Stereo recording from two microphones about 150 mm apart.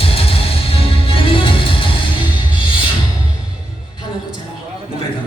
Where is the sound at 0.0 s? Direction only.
40° left (ahead or behind).